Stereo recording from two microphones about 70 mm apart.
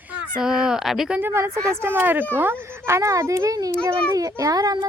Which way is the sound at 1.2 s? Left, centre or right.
Right.